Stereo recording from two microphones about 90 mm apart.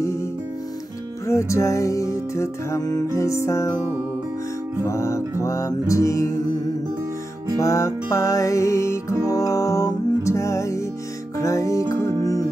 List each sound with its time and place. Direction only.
1.2 s music: 30° left (ahead or behind)
4.8 s music: 30° left (ahead or behind)
7.6 s music: 35° left (ahead or behind)